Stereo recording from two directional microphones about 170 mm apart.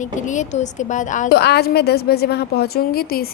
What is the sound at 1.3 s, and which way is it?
A woman's voice, 70° left (ahead or behind).